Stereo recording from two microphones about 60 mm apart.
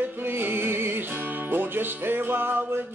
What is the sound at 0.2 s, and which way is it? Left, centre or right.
Music, right.